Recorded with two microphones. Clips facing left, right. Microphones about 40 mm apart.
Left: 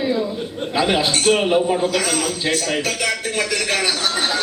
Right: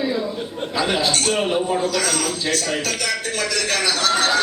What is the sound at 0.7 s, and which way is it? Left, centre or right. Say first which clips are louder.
A man's voice: left 2 dB; left.